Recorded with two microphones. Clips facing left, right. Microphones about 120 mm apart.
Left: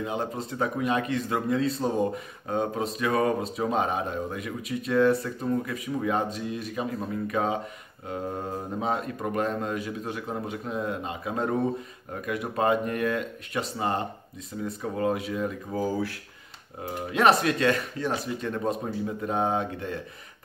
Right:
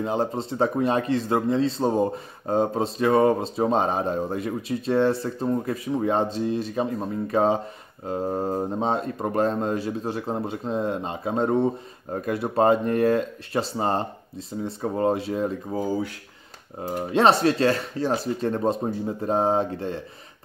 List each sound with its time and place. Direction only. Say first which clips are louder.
0.0 s speech: right 5 dB; 35° right (ahead or behind)